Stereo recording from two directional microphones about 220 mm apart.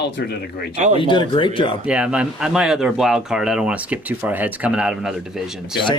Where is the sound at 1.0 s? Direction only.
20° left (ahead or behind).